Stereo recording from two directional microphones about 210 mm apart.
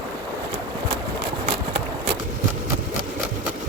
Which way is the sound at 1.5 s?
30° right (ahead or behind).